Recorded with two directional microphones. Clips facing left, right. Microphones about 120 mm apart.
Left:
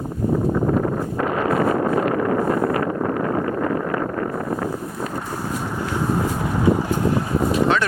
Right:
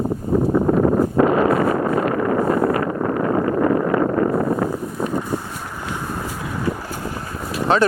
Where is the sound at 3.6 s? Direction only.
25° right (ahead or behind).